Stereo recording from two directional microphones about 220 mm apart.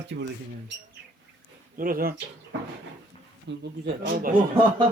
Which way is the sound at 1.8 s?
40° right (ahead or behind).